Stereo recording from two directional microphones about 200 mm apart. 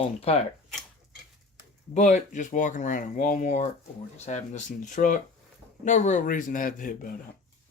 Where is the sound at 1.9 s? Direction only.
40° left (ahead or behind).